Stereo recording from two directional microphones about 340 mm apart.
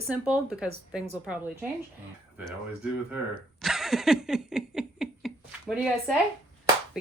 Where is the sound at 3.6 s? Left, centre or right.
Centre.